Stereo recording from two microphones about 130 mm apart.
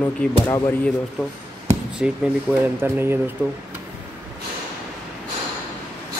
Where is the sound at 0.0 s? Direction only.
15° left (ahead or behind).